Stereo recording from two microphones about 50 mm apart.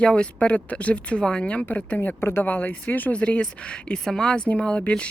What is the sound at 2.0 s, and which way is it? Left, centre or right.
Speech, left.